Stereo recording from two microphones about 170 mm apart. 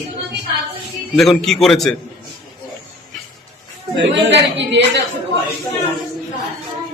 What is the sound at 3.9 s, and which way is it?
Speech, 90° right.